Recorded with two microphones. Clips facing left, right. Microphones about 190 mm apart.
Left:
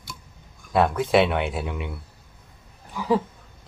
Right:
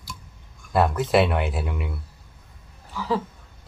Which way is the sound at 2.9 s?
15° left (ahead or behind).